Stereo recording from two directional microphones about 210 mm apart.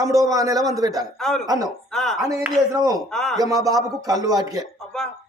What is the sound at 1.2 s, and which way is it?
Speech, centre (ahead or behind).